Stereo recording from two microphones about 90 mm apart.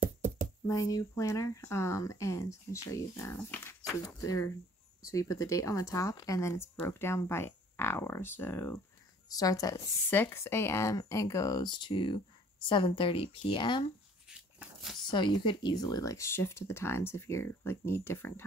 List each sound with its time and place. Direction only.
0.7 s speech: 40° left (ahead or behind); by 8.8 s 25° left (ahead or behind)
9.3 s speech: 40° left (ahead or behind)
10.0 s speech: 25° left (ahead or behind); by 13.9 s 65° left (ahead or behind)
14.3 s a sound: 5° right (ahead or behind)
15.0 s speech: 60° left (ahead or behind); by 18.4 s 25° left (ahead or behind)